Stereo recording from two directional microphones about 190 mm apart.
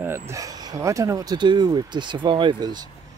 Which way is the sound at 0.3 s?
20° right (ahead or behind).